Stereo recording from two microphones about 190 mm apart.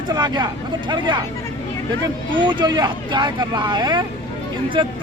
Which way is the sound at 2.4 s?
25° right (ahead or behind).